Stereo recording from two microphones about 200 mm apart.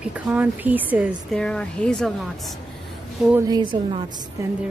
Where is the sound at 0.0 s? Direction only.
5° right (ahead or behind).